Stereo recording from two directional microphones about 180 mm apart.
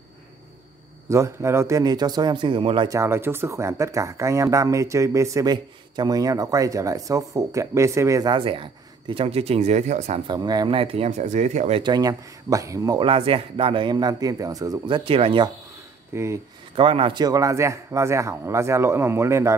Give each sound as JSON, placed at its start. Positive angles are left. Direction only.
{"t": 1.0, "sound": "speech", "side_deg": -15}
{"t": 2.9, "sound": "speech", "side_deg": -15}
{"t": 10.2, "sound": "speech", "side_deg": -20}
{"t": 11.8, "sound": "speech", "side_deg": -20}
{"t": 16.1, "sound": "speech", "side_deg": -15}
{"t": 16.7, "sound": "speech", "side_deg": -30}